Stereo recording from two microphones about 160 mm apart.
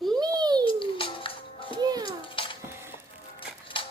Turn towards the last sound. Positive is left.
turn(degrees=35)  # may be behind; listen again after turning